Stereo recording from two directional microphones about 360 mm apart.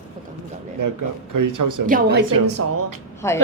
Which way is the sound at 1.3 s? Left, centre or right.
Right.